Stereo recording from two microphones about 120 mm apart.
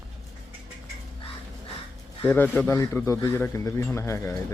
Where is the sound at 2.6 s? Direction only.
25° left (ahead or behind).